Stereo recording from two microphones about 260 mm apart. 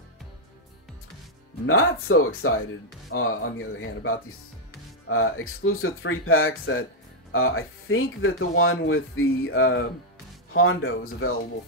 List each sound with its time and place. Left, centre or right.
1.7 s speech: left